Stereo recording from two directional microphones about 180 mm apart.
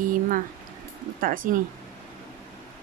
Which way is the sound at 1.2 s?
50° right (ahead or behind).